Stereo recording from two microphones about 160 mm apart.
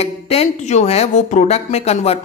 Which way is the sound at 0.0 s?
40° left (ahead or behind).